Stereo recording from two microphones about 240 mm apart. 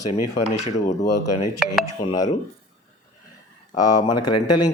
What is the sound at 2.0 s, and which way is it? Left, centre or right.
Speech, centre.